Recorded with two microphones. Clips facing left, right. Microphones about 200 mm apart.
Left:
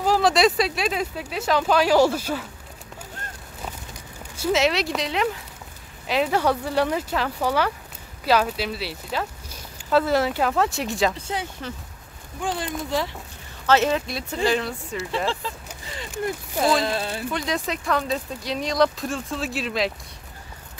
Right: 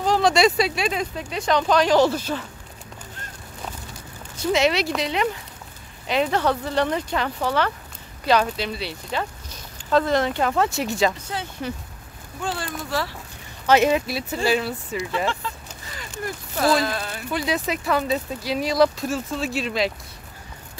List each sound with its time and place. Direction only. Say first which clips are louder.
0.0 s speech: right 1 dB; 5° left (ahead or behind)
4.4 s speech: right 1 dB; centre (ahead or behind)
11.6 s speech: right 4 dB; 15° right (ahead or behind)
12.4 s speech: left 2 dB; 15° left (ahead or behind)
13.7 s speech: right 2 dB; 15° right (ahead or behind)
16.1 s speech: left 4 dB; 15° left (ahead or behind)
16.8 s speech: left 1 dB; 25° left (ahead or behind)
17.3 s speech: right 5 dB; 5° right (ahead or behind)